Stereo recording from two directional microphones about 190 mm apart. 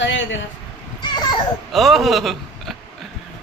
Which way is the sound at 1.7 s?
Centre (ahead or behind).